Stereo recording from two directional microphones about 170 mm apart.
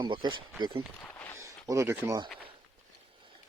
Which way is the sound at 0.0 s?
25° right (ahead or behind).